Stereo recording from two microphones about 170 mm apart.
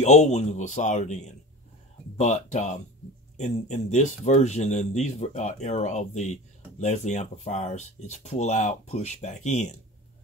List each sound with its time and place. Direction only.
0.0 s speech: 40° left (ahead or behind)